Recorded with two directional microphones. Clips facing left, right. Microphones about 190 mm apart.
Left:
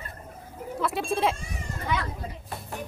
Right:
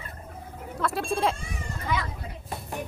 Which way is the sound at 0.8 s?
Centre (ahead or behind).